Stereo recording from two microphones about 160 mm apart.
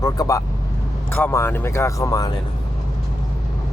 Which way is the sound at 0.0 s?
20° left (ahead or behind).